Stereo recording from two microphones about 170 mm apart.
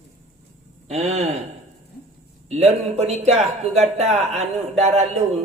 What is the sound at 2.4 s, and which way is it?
A man's voice, 40° right (ahead or behind).